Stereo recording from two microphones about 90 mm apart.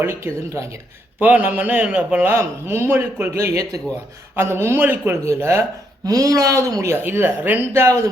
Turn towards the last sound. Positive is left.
turn(degrees=-25)  # may be behind; listen again after turning